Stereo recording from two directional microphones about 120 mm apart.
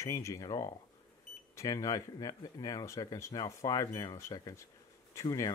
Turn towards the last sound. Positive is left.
turn(degrees=30)  # may be behind; listen again after turning